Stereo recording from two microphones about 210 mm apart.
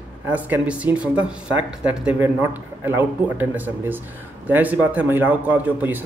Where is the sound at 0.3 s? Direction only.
5° right (ahead or behind).